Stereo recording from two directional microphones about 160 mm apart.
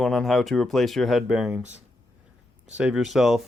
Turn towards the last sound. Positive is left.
turn(degrees=0)  # may be behind; listen again after turning